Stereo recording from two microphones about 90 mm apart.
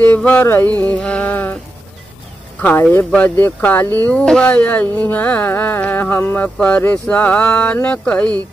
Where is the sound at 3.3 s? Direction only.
20° left (ahead or behind).